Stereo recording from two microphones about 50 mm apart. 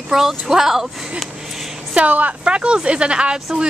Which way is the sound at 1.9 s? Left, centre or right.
Right.